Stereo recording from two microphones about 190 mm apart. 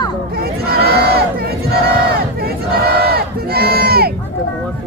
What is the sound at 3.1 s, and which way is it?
Crowd, 55° right (ahead or behind).